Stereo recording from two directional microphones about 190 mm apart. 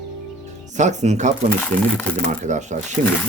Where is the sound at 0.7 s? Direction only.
40° right (ahead or behind).